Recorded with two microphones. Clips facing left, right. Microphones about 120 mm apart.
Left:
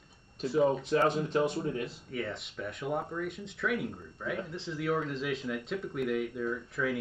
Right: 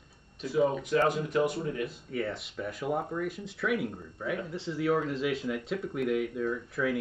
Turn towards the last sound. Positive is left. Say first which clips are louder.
# right 2 dB
turn(degrees=0)  # may be behind; listen again after turning